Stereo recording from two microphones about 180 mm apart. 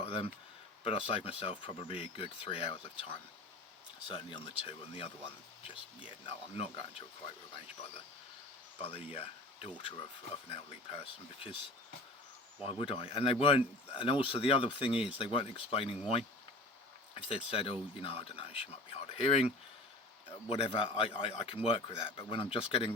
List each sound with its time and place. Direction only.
0.0 s a sound: 30° left (ahead or behind)
0.9 s a man's voice: 30° left (ahead or behind)
8.8 s a man's voice: 30° left (ahead or behind)
12.6 s speech: 30° left (ahead or behind)
17.2 s a man's voice: 30° left (ahead or behind)